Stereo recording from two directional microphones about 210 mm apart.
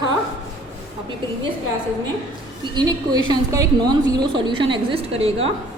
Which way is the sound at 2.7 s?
20° right (ahead or behind).